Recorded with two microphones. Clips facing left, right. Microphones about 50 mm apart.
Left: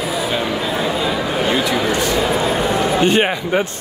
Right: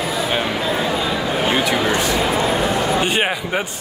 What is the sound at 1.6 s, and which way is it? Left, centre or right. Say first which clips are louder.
Speech: even; right.